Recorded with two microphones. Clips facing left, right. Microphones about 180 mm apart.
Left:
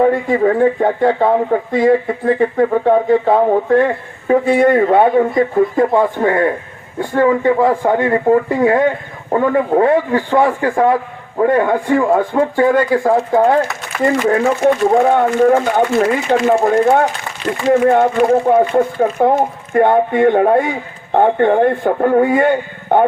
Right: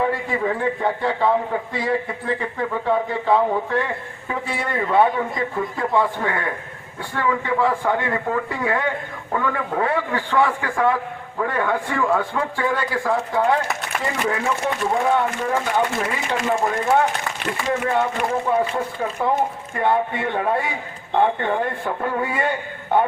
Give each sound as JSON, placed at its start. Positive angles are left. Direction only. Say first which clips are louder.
{"t": 0.0, "sound": "a man's voice", "louder": "left 9 dB", "side_deg": 45}